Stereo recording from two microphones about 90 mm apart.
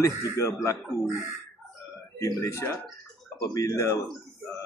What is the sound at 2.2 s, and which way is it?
Speech, 35° left (ahead or behind).